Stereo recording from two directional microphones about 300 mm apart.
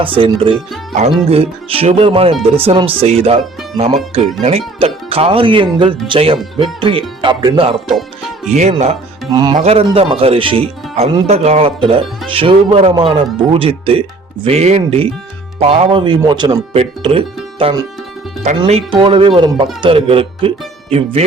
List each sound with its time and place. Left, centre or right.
0.0 s speech: centre